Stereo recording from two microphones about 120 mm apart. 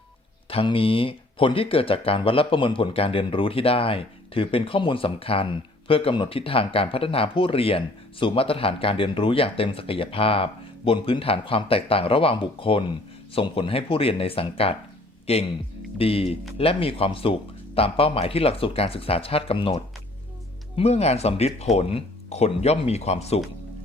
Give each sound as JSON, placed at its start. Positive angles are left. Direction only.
{"t": 0.5, "sound": "speech", "side_deg": 50}
{"t": 16.0, "sound": "speech", "side_deg": 55}